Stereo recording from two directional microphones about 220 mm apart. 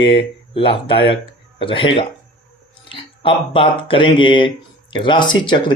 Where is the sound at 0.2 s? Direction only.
25° left (ahead or behind).